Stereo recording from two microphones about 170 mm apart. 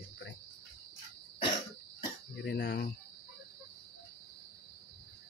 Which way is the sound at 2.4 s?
80° left.